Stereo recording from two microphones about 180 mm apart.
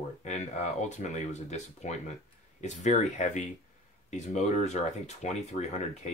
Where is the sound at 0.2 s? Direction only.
40° left (ahead or behind).